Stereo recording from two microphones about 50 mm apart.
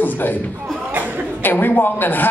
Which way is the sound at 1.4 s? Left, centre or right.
Left.